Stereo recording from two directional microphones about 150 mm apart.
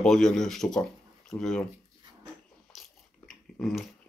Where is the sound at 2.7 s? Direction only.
Centre (ahead or behind).